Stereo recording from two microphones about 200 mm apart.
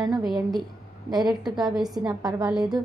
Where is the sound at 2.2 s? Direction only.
20° right (ahead or behind).